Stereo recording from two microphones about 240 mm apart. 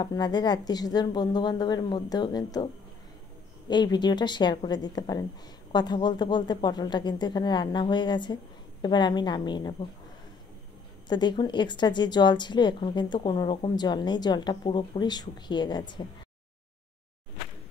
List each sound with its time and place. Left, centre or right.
0.0 s a woman's voice: centre
11.1 s a woman's voice: centre